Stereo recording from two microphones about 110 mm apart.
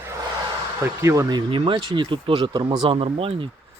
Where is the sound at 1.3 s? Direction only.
45° right (ahead or behind).